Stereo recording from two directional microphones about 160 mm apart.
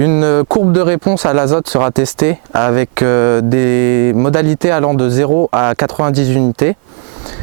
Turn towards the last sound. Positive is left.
turn(degrees=-15)  # may be behind; listen again after turning